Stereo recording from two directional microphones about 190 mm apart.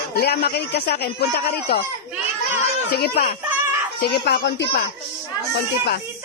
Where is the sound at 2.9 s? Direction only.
55° left (ahead or behind).